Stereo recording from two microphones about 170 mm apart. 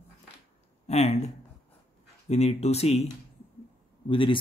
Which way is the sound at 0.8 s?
40° left (ahead or behind).